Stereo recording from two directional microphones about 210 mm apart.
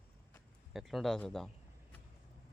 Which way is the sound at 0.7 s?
Centre (ahead or behind).